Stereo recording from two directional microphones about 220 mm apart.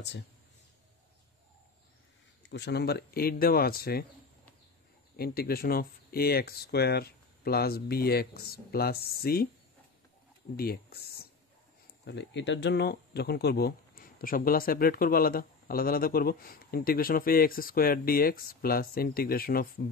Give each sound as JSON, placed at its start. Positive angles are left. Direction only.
{"t": 2.5, "sound": "speech", "side_deg": 50}
{"t": 5.1, "sound": "speech", "side_deg": 45}
{"t": 10.5, "sound": "speech", "side_deg": 45}